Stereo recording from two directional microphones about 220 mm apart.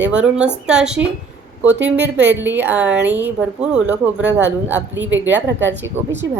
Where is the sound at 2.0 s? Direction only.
50° right (ahead or behind).